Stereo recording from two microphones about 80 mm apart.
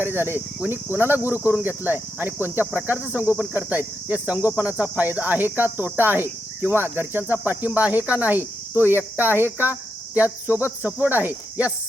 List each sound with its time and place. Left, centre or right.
0.0 s cricket: right